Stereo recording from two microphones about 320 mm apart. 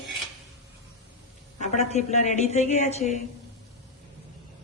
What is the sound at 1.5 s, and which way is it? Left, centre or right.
A woman's voice, left.